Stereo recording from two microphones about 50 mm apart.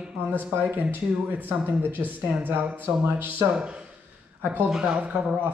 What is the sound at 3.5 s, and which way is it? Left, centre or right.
Speech, centre.